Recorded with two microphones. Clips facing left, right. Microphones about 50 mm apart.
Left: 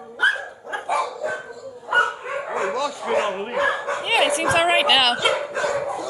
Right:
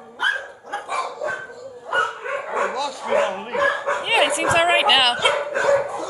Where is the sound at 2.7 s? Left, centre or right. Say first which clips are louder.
Right 1 dB; centre.